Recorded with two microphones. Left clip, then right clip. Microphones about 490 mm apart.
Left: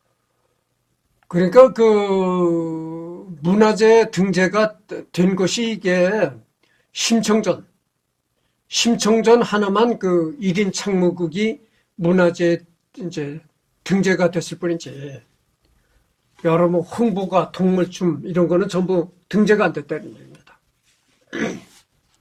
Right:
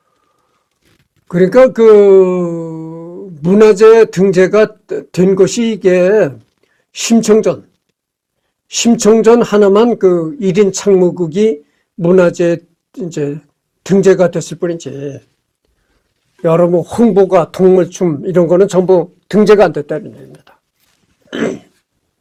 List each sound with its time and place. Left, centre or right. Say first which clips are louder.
1.3 s speech: right 4 dB; right
8.6 s speech: right 8 dB; right
16.4 s speech: right 7 dB; right